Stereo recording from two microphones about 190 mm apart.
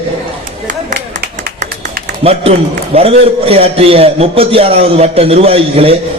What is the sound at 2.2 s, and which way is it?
A man's voice, 30° right (ahead or behind).